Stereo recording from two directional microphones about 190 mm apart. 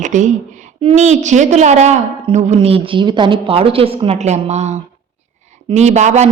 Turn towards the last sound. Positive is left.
turn(degrees=-35)  # may be behind; listen again after turning